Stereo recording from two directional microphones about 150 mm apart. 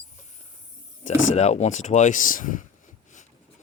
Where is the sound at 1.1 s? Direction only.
50° left (ahead or behind).